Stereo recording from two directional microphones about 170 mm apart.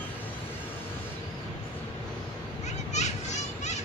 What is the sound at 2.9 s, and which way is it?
Children playing, 45° left (ahead or behind).